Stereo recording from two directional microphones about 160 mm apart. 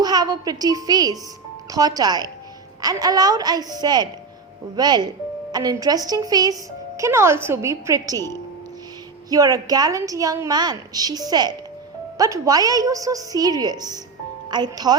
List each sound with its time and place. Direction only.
0.0 s a woman's voice: 25° right (ahead or behind)
9.3 s a woman's voice: 20° right (ahead or behind)